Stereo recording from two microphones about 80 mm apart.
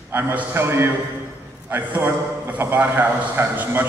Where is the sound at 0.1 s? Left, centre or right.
Right.